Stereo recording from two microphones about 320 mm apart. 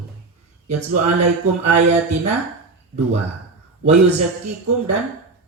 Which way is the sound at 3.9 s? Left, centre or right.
Centre.